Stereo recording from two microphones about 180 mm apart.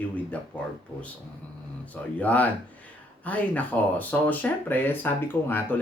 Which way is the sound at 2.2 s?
10° left (ahead or behind).